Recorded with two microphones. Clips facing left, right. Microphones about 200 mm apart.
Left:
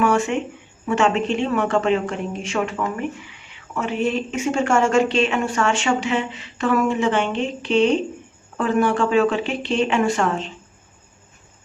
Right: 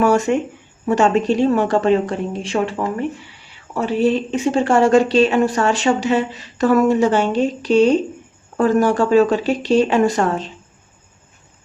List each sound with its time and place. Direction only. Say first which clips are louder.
0.0 s speech: right 4 dB; 40° right (ahead or behind)